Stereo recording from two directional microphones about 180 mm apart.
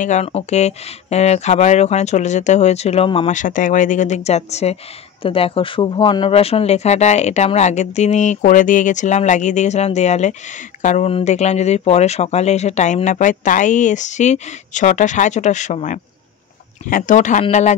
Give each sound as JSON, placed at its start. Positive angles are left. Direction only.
{"t": 0.0, "sound": "speech", "side_deg": 40}
{"t": 3.3, "sound": "speech", "side_deg": 45}